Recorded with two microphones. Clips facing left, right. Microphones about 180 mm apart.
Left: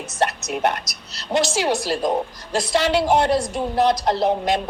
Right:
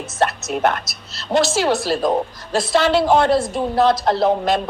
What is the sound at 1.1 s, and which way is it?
A woman's voice, 15° left (ahead or behind).